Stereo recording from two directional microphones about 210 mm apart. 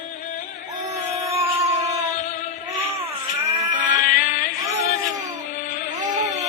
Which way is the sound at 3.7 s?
40° left (ahead or behind).